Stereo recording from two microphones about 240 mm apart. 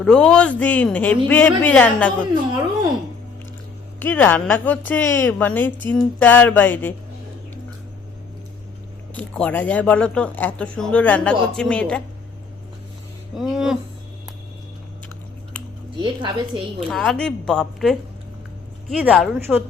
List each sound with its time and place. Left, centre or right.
0.0 s speech: centre
4.0 s a woman's voice: centre
9.1 s speech: centre
13.3 s speech: centre
16.0 s a woman's voice: centre
16.9 s speech: centre